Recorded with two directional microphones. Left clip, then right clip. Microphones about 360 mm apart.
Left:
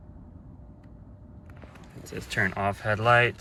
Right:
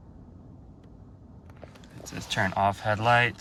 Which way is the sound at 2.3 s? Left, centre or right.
Centre.